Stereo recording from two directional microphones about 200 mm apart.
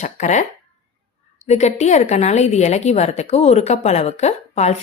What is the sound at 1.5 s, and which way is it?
A woman's voice, 35° left (ahead or behind).